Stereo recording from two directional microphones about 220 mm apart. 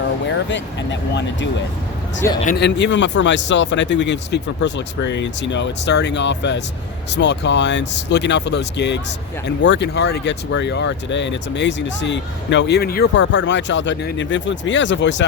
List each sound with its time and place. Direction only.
0.3 s speech: 55° left (ahead or behind)
2.2 s speech: 10° left (ahead or behind)
2.6 s speech: 50° left (ahead or behind)